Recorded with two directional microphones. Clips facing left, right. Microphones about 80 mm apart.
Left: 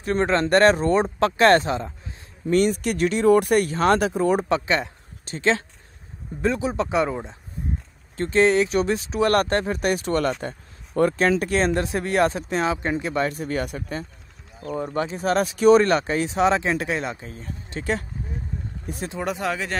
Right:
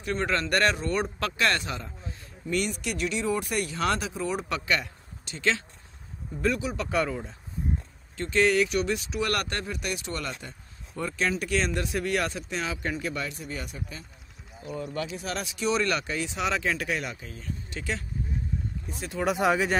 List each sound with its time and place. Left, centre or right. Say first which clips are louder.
0.0 s speech: left 7 dB; left
2.4 s speech: left 9 dB; left
4.5 s speech: left 6 dB; left
8.2 s speech: left 5 dB; left
13.3 s speech: left 10 dB; left
14.7 s speech: left 7 dB; left
18.9 s speech: left 6 dB; left
19.3 s speech: right 2 dB; centre